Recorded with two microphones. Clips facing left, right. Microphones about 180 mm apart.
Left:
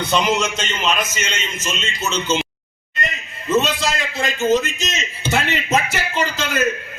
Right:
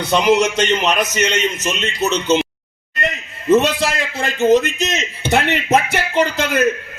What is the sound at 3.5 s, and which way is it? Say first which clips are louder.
A man's voice: right 5 dB; 60° right (ahead or behind).